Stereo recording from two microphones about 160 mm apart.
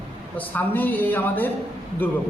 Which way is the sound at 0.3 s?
10° left (ahead or behind).